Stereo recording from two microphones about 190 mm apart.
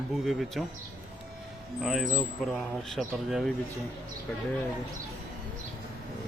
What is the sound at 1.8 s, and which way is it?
Speech, centre (ahead or behind).